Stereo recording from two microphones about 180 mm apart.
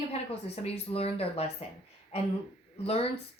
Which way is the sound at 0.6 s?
35° left (ahead or behind).